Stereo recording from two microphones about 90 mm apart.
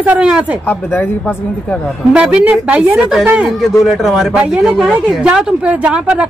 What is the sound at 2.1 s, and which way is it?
A man's voice, 10° right (ahead or behind).